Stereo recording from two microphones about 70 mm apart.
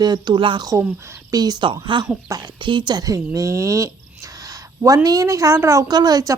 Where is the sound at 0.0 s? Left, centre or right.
Right.